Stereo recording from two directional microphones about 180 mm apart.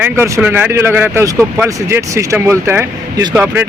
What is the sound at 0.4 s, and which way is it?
Speech, 10° right (ahead or behind).